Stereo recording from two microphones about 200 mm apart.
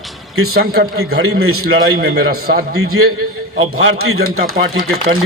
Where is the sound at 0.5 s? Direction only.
50° right (ahead or behind).